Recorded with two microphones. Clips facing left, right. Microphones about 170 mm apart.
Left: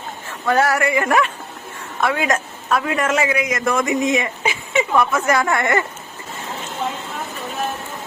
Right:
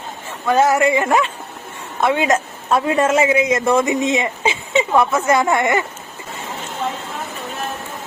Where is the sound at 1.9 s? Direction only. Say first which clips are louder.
Right 3 dB; 25° right (ahead or behind).